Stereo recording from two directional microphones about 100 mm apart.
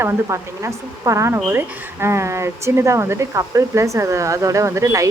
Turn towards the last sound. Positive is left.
turn(degrees=-30)  # may be behind; listen again after turning